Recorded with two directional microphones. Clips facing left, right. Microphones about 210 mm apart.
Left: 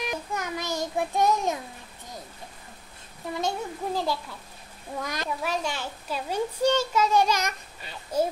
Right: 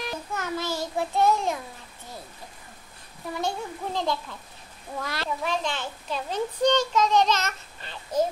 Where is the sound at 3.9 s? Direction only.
5° left (ahead or behind).